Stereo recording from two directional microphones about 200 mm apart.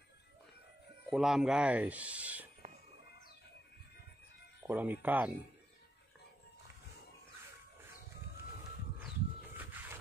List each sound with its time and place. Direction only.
1.1 s speech: 5° right (ahead or behind)
2.6 s music: 35° right (ahead or behind)
4.6 s speech: 10° right (ahead or behind)
9.6 s music: 10° right (ahead or behind)